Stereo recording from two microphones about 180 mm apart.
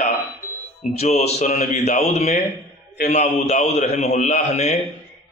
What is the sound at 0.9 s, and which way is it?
A man's voice, 35° left (ahead or behind).